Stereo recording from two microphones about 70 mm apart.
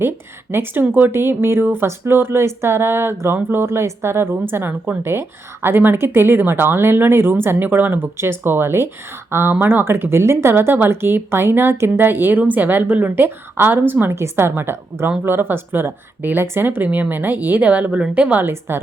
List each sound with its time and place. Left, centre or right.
0.5 s speech: right
18.4 s speech: right